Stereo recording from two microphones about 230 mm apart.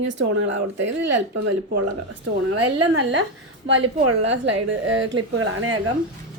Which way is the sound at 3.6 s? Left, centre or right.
Right.